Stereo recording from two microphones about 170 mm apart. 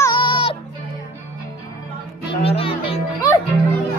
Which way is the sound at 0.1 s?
30° left (ahead or behind).